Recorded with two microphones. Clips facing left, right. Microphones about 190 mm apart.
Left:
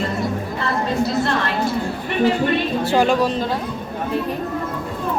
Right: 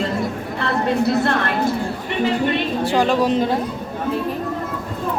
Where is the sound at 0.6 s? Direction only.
60° right (ahead or behind).